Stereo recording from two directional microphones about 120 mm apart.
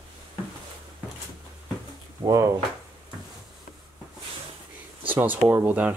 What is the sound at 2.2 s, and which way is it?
Speech, 25° right (ahead or behind).